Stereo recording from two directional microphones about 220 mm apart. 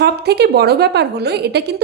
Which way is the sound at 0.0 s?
50° right (ahead or behind).